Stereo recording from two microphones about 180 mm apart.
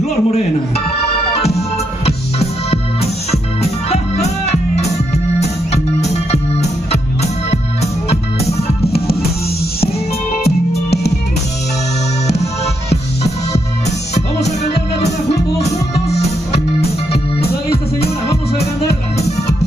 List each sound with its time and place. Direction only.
0.0 s speech: 35° left (ahead or behind)
1.3 s organ: 35° left (ahead or behind)
2.0 s music: 35° left (ahead or behind)
7.5 s music: 35° left (ahead or behind)
12.9 s music: 35° left (ahead or behind)
15.5 s music: 35° left (ahead or behind)